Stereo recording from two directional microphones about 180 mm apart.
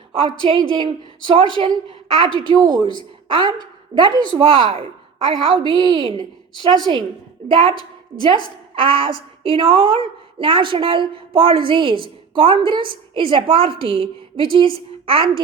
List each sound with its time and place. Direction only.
0.1 s a woman's voice: 30° right (ahead or behind)